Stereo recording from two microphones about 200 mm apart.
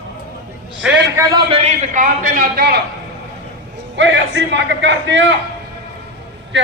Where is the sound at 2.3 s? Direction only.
50° right (ahead or behind).